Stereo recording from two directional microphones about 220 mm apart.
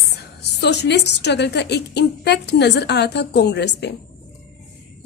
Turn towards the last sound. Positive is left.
turn(degrees=50)  # may be behind; listen again after turning